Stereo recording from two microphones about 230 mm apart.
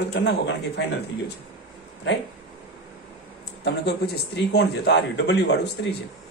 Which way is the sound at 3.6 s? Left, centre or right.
Left.